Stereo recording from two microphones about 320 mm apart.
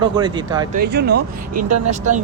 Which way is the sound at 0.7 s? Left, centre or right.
Right.